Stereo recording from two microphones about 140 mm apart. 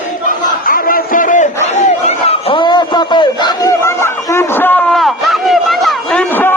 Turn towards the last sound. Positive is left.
turn(degrees=15)  # may be behind; listen again after turning